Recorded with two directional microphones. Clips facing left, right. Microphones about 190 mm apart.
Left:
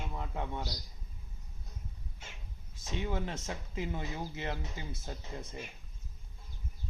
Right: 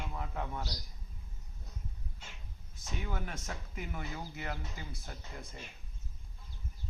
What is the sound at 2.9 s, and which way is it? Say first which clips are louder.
Speech: left 5 dB; 25° left (ahead or behind).